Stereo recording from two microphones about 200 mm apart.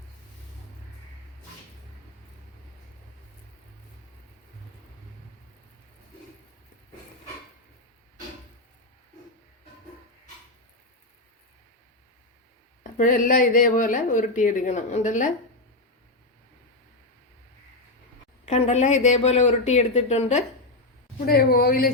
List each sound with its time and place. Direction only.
12.8 s a woman's voice: 40° left (ahead or behind)
18.4 s a woman's voice: 35° left (ahead or behind)
21.2 s speech: 50° left (ahead or behind)